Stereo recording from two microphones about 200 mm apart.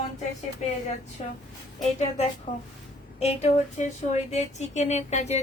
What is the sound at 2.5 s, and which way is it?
Speech, 40° left (ahead or behind).